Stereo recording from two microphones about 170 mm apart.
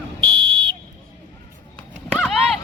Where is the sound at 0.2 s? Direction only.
30° right (ahead or behind).